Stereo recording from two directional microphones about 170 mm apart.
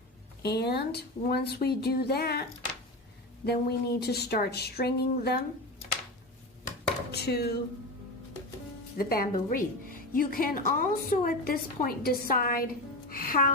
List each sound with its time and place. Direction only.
0.4 s a woman's voice: 75° left (ahead or behind)
7.1 s speech: 70° left (ahead or behind)
9.0 s a woman's voice: 60° left (ahead or behind)
13.1 s music: 55° left (ahead or behind)